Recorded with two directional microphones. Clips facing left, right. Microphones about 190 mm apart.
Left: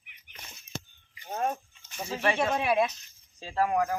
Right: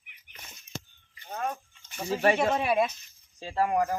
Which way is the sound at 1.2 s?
25° left (ahead or behind).